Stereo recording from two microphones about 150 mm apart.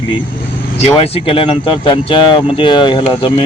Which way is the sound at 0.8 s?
40° left (ahead or behind).